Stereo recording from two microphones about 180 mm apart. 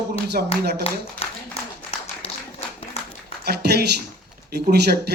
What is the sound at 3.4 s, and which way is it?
Speech, 60° right (ahead or behind).